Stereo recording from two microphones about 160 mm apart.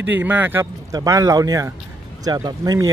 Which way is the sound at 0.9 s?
20° right (ahead or behind).